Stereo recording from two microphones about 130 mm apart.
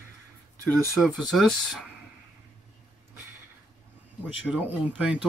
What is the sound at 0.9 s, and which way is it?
Speech, centre (ahead or behind).